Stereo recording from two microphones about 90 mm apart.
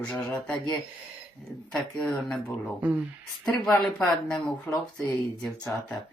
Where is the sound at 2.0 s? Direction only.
15° left (ahead or behind).